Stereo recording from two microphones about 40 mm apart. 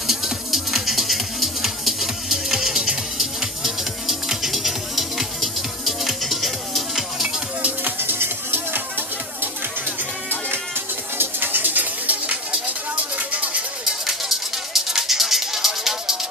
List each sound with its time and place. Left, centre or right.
0.0 s music: centre
8.0 s music: right
11.1 s bird: right
12.6 s a sound: right
14.7 s music: centre